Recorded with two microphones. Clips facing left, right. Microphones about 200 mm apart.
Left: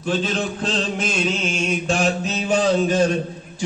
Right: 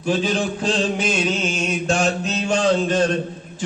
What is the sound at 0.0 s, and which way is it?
Mantra, 5° right (ahead or behind).